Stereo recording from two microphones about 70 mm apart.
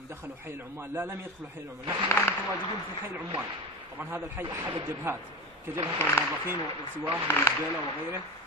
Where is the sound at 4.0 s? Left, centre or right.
Right.